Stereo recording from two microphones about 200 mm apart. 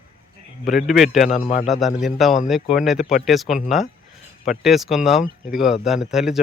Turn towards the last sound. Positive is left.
turn(degrees=0)  # may be behind; listen again after turning